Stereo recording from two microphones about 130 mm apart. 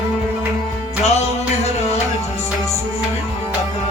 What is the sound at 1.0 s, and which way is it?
Music, 55° left (ahead or behind).